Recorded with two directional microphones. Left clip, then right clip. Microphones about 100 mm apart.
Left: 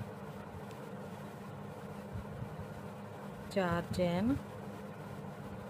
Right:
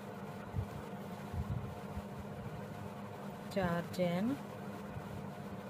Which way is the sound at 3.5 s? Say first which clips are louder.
Left 3 dB; 50° left (ahead or behind).